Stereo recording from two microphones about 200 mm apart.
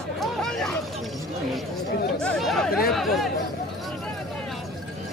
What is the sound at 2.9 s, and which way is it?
Chatter, centre (ahead or behind).